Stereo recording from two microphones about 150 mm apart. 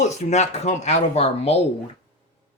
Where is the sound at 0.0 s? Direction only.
50° left (ahead or behind).